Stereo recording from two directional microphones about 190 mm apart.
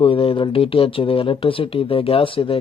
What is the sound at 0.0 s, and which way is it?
Speech, 30° left (ahead or behind).